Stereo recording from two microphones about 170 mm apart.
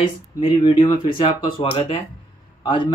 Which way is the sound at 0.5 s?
30° left (ahead or behind).